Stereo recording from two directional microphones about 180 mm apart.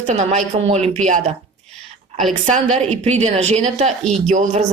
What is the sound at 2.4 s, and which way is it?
A woman's voice, 40° right (ahead or behind).